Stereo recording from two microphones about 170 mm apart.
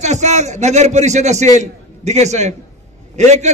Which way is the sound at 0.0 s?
45° right (ahead or behind).